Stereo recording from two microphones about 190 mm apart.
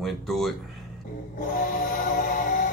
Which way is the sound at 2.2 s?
45° left (ahead or behind).